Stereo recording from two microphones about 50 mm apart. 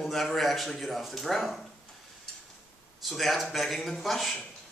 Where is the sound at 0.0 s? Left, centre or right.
Centre.